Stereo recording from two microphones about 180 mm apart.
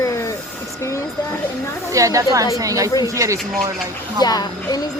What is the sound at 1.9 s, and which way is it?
Speech, 20° right (ahead or behind).